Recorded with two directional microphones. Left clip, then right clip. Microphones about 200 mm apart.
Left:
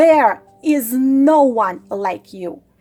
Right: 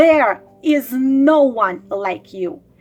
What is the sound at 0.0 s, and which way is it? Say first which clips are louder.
Speech: left 1 dB; 30° left (ahead or behind).